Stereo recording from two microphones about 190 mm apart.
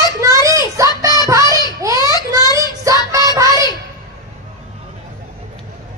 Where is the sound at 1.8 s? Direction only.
15° right (ahead or behind).